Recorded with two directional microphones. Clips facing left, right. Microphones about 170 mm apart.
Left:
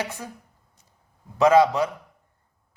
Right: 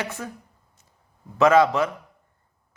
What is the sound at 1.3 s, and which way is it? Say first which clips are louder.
Speech: even; 15° left (ahead or behind).